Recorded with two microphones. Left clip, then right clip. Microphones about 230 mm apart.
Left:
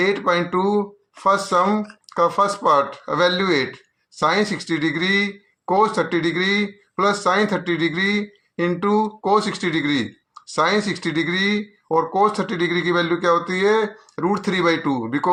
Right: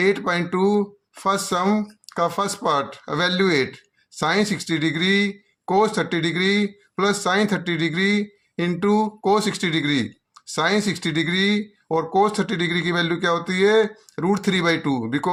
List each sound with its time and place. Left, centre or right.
0.0 s speech: right